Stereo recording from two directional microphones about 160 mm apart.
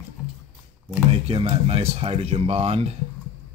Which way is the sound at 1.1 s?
35° right (ahead or behind).